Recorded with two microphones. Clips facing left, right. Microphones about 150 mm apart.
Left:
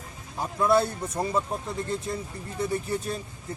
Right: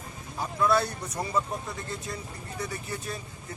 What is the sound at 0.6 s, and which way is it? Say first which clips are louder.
Speech: left 3 dB; 25° left (ahead or behind).